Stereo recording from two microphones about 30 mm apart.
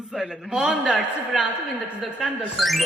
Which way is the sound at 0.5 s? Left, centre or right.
Right.